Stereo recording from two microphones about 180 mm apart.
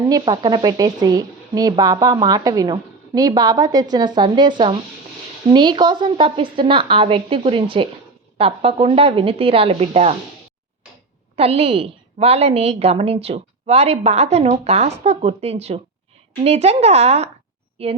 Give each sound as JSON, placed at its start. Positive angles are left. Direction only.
{"t": 0.0, "sound": "a woman's voice", "side_deg": -25}
{"t": 11.3, "sound": "a woman's voice", "side_deg": -35}